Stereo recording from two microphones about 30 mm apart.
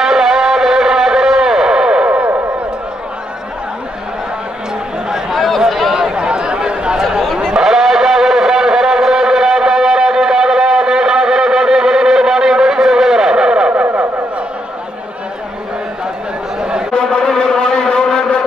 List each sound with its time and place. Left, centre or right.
0.0 s music: centre
5.7 s a sound: centre
6.1 s chatter: right
7.0 s chatter: centre
7.6 s a sound: centre
13.7 s vehicle: right
16.9 s music: left